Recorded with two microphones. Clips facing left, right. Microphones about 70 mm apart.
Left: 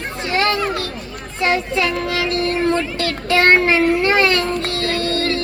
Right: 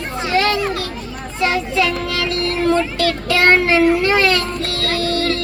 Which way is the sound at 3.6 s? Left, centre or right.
Centre.